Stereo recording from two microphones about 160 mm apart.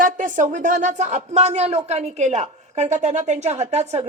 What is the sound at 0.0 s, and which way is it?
Speech, 55° right (ahead or behind).